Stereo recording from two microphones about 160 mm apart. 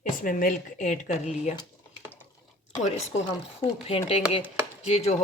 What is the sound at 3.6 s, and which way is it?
Speech, 40° left (ahead or behind).